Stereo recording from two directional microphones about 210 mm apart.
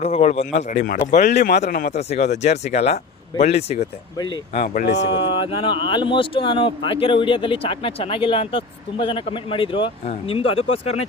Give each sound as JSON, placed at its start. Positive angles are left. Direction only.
{"t": 0.0, "sound": "speech", "side_deg": 30}
{"t": 1.3, "sound": "speech", "side_deg": 50}
{"t": 1.6, "sound": "speech", "side_deg": 35}
{"t": 4.6, "sound": "speech", "side_deg": 45}
{"t": 5.0, "sound": "speech", "side_deg": 25}